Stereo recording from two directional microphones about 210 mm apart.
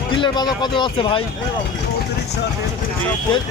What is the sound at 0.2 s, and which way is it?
Speech, 20° left (ahead or behind).